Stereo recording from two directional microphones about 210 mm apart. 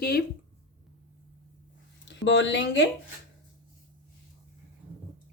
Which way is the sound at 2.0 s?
60° left (ahead or behind).